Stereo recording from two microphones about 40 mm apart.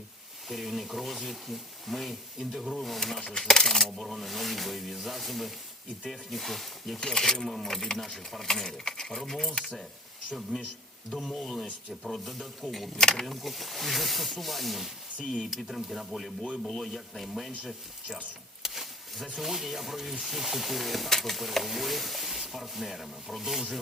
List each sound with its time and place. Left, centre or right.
0.4 s speech: centre
3.3 s speech: centre
9.5 s speech: left
11.1 s speech: centre
13.0 s speech: centre
13.2 s speech: centre
18.6 s a sound: centre
19.4 s speech: centre